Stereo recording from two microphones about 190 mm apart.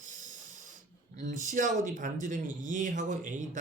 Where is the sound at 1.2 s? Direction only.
40° right (ahead or behind).